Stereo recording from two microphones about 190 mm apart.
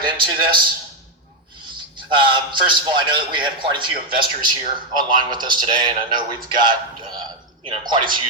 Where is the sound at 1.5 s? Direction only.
25° right (ahead or behind).